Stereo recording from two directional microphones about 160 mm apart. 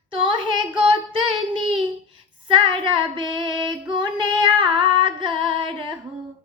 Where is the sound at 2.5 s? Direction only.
30° right (ahead or behind).